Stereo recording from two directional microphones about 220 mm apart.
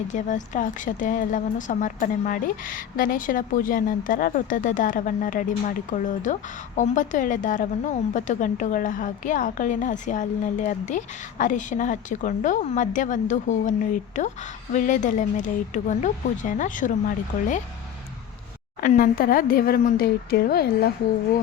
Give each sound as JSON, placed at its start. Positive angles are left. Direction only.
{"t": 0.1, "sound": "a woman's voice", "side_deg": 35}
{"t": 18.8, "sound": "a woman's voice", "side_deg": 40}